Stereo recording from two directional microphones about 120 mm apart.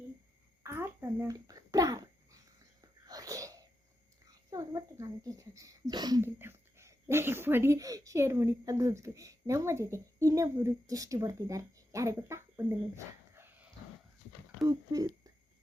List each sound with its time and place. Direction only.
0.6 s a sound: 20° right (ahead or behind)
2.8 s sneeze: 30° right (ahead or behind)
4.3 s speech: 30° right (ahead or behind)
6.2 s speech: 20° right (ahead or behind)
13.3 s dog: 15° right (ahead or behind)
14.7 s speech: 30° right (ahead or behind)